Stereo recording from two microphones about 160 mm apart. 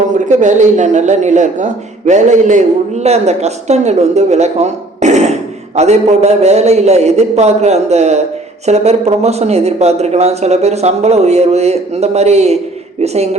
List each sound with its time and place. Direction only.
0.1 s a man's voice: 50° right (ahead or behind)